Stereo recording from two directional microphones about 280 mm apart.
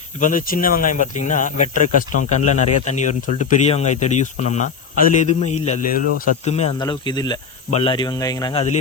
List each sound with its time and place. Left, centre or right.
0.2 s speech: left